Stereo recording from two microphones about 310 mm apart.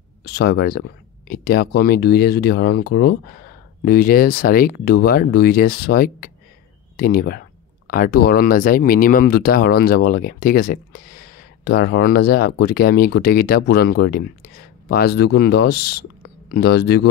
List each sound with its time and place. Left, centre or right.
0.2 s speech: left